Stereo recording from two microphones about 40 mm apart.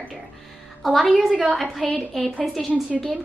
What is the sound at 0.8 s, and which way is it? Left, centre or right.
Speech, centre.